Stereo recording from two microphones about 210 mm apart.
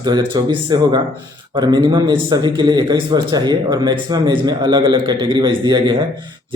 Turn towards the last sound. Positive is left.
turn(degrees=-20)  # may be behind; listen again after turning